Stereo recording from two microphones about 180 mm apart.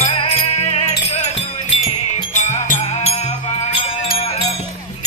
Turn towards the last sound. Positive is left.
turn(degrees=40)  # may be behind; listen again after turning